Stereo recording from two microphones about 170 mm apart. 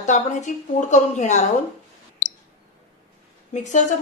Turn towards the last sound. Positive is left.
turn(degrees=45)  # may be behind; listen again after turning